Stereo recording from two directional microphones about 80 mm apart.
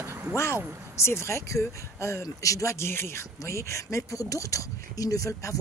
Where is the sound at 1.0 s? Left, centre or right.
Left.